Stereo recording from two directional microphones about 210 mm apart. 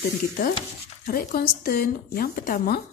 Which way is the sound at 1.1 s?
45° left (ahead or behind).